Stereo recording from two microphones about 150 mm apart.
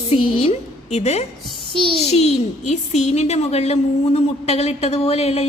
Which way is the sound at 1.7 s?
35° right (ahead or behind).